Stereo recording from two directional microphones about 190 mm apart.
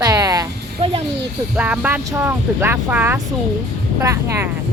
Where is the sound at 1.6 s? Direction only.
5° right (ahead or behind).